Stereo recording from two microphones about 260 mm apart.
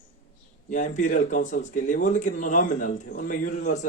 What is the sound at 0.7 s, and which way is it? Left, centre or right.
Speech, left.